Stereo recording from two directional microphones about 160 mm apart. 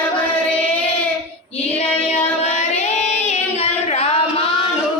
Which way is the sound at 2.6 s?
45° left (ahead or behind).